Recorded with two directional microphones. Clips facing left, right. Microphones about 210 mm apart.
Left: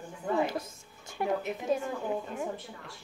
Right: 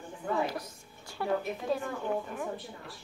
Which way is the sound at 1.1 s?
20° left (ahead or behind).